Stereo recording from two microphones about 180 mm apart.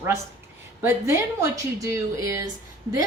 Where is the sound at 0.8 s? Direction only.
15° right (ahead or behind).